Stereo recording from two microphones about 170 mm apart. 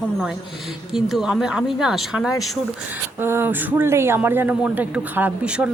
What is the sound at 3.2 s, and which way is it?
Speech, 15° right (ahead or behind).